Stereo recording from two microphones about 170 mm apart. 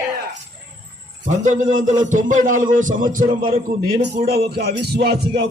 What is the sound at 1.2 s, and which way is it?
A man's voice, 45° right (ahead or behind).